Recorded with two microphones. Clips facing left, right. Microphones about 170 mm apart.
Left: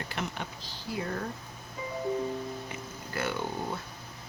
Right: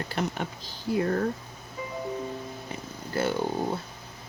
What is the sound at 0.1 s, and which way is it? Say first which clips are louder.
Speech: right 6 dB; 40° right (ahead or behind).